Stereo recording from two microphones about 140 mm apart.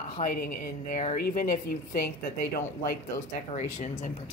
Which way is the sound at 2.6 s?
90° left.